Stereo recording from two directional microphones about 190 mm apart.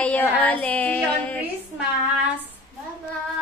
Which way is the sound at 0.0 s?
5° left (ahead or behind).